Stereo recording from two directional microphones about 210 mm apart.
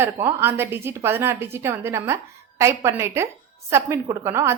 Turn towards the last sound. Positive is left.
turn(degrees=-15)  # may be behind; listen again after turning